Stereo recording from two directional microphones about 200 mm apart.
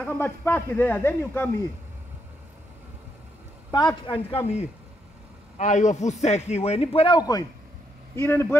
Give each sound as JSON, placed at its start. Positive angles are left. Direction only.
{"t": 0.0, "sound": "speech", "side_deg": 10}
{"t": 3.7, "sound": "speech", "side_deg": 25}
{"t": 5.6, "sound": "a man's voice", "side_deg": 35}